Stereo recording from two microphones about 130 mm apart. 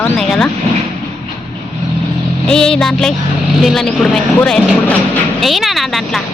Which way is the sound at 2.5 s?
5° left (ahead or behind).